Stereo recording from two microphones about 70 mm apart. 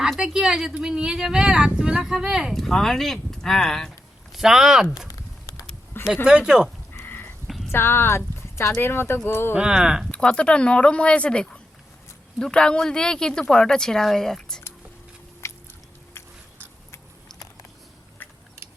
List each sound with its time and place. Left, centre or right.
0.2 s speech: centre
2.5 s speech: centre
5.0 s a sound: left
6.2 s speech: centre
7.0 s a sound: left
7.4 s a sound: centre
7.7 s speech: left
9.6 s speech: centre
10.1 s speech: centre
15.4 s biting: left